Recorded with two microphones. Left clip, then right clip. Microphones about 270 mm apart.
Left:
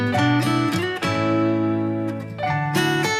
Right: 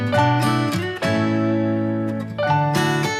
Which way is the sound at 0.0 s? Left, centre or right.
Centre.